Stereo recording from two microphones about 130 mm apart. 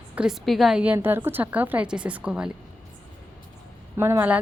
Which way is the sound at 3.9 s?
20° right (ahead or behind).